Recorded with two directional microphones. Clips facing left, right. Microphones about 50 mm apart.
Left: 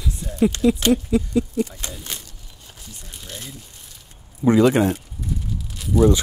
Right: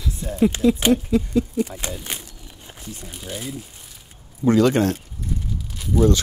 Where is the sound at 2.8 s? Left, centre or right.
Right.